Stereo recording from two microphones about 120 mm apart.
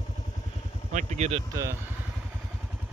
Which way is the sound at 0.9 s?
90° right.